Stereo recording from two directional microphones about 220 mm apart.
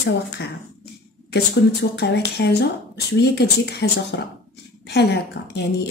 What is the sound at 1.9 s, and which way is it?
A woman's voice, 50° left (ahead or behind).